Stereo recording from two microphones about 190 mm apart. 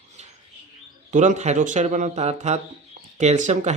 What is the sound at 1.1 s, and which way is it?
Speech, 40° right (ahead or behind).